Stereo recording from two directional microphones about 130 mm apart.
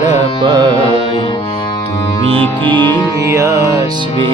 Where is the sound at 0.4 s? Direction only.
35° right (ahead or behind).